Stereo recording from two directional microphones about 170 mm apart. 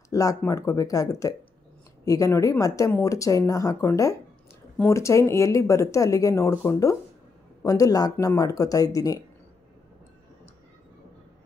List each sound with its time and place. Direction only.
0.1 s speech: 20° left (ahead or behind)